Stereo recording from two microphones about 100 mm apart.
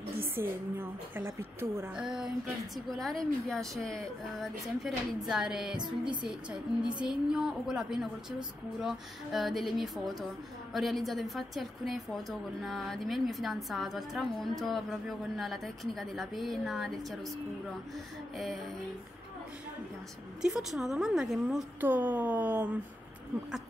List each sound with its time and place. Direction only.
0.4 s a woman's voice: 20° right (ahead or behind)
2.0 s a woman's voice: 5° right (ahead or behind)
5.8 s music: 50° right (ahead or behind)
6.2 s a woman's voice: 5° right (ahead or behind)
20.4 s a woman's voice: 5° right (ahead or behind)
21.7 s speech: 20° right (ahead or behind)